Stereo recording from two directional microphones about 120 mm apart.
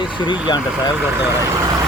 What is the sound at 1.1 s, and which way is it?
Speech, 25° right (ahead or behind).